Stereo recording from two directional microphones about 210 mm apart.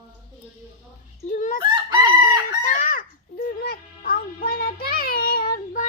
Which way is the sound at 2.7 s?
40° left (ahead or behind).